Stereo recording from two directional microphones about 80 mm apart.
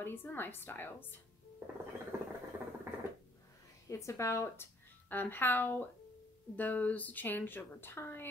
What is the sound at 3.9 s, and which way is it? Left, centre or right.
Speech, left.